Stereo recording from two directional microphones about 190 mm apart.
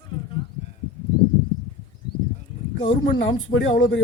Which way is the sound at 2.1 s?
25° left (ahead or behind).